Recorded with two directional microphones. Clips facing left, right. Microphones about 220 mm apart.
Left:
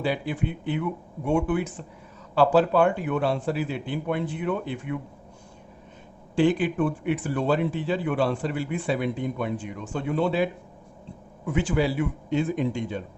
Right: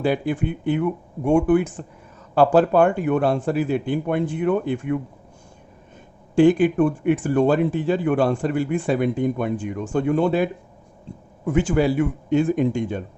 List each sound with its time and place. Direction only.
0.0 s speech: 50° right (ahead or behind)
6.3 s speech: 45° right (ahead or behind)